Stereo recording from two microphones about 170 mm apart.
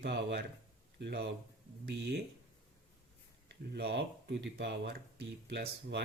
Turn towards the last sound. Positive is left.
turn(degrees=-90)